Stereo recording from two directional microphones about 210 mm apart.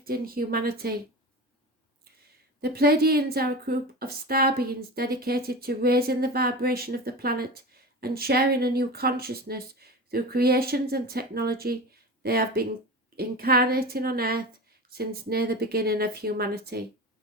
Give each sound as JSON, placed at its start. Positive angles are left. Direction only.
{"t": 0.0, "sound": "speech", "side_deg": -45}
{"t": 2.6, "sound": "speech", "side_deg": -50}